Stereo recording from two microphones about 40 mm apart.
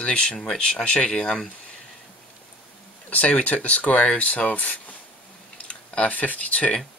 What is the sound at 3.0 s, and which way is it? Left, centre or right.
Speech, left.